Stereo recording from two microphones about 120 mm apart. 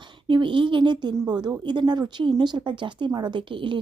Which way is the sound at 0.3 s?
45° right (ahead or behind).